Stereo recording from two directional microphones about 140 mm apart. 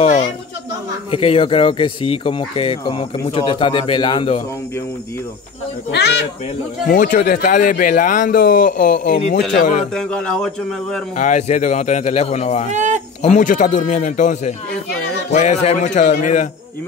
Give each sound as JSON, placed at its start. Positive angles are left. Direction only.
{"t": 0.0, "sound": "speech", "side_deg": 45}
{"t": 6.9, "sound": "a man's voice", "side_deg": 90}
{"t": 9.9, "sound": "a man's voice", "side_deg": 10}
{"t": 11.1, "sound": "a man's voice", "side_deg": 60}
{"t": 12.6, "sound": "speech", "side_deg": -60}
{"t": 13.2, "sound": "a man's voice", "side_deg": 65}